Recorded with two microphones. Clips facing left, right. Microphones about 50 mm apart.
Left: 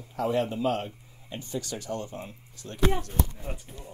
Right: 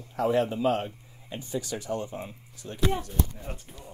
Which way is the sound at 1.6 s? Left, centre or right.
Centre.